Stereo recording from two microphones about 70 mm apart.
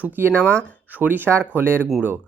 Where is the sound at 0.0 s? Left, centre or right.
Right.